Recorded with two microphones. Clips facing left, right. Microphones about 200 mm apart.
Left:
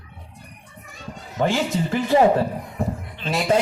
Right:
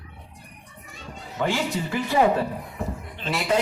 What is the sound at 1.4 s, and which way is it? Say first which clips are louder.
Speech: left 4 dB; 40° left (ahead or behind).